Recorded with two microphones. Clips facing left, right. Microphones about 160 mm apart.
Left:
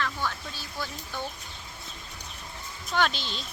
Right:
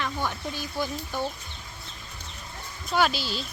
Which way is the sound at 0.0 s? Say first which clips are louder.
Right 2 dB; 15° right (ahead or behind).